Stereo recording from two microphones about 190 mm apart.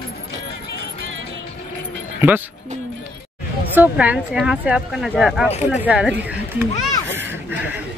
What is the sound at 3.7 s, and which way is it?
Speech, 10° right (ahead or behind).